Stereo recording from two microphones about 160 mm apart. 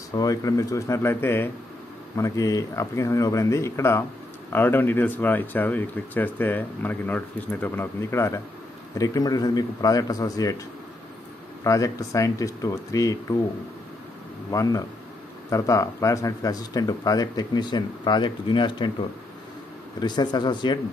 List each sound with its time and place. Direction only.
0.1 s speech: 20° left (ahead or behind)
11.6 s speech: 20° left (ahead or behind)
14.5 s speech: 20° left (ahead or behind)
20.0 s speech: 25° left (ahead or behind)